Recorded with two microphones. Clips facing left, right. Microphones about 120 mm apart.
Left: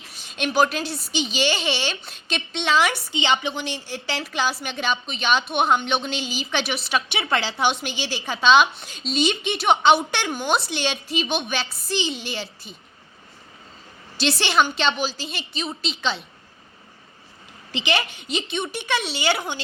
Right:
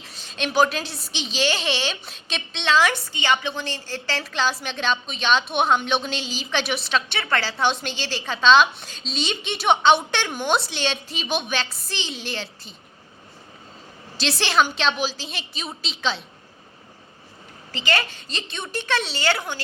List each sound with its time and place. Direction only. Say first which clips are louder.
0.0 s a woman's voice: left 1 dB; centre (ahead or behind)
3.1 s a woman's voice: left 1 dB; 20° left (ahead or behind)
4.2 s a woman's voice: even; 5° left (ahead or behind)
7.2 s a woman's voice: left 1 dB; 20° left (ahead or behind)
7.6 s a woman's voice: even; 5° left (ahead or behind)
14.2 s a woman's voice: left 1 dB; centre (ahead or behind)
17.7 s a woman's voice: left 1 dB; 20° left (ahead or behind)
18.5 s a woman's voice: right 2 dB; 5° left (ahead or behind)
19.2 s a woman's voice: left 1 dB; 20° left (ahead or behind)